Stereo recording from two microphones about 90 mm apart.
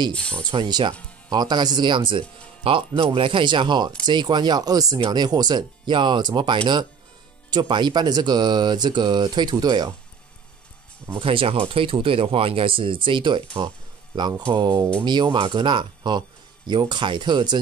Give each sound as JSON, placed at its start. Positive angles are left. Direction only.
{"t": 0.1, "sound": "speech", "side_deg": 10}
{"t": 0.4, "sound": "speech", "side_deg": -55}
{"t": 11.1, "sound": "speech", "side_deg": -85}
{"t": 14.5, "sound": "speech", "side_deg": -60}